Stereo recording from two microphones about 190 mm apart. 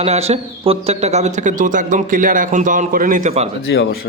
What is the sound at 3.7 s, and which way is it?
Speech, 60° left (ahead or behind).